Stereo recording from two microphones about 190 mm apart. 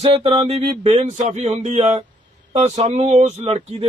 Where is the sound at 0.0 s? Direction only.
30° right (ahead or behind).